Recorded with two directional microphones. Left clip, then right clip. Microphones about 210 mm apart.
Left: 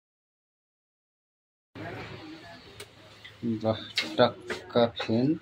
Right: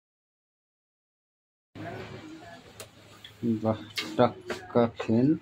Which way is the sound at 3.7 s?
15° right (ahead or behind).